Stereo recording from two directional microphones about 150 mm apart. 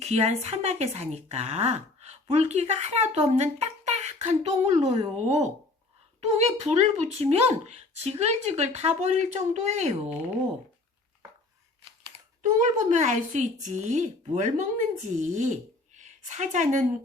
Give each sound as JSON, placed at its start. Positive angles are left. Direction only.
{"t": 0.0, "sound": "speech", "side_deg": -50}
{"t": 12.4, "sound": "a woman's voice", "side_deg": -60}